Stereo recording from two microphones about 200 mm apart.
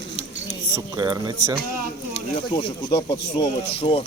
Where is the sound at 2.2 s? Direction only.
25° left (ahead or behind).